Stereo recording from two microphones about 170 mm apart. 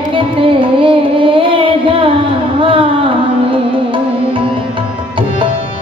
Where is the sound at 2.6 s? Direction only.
30° right (ahead or behind).